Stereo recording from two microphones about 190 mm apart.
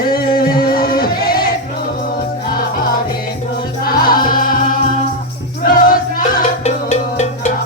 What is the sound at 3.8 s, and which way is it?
Music, 50° left (ahead or behind).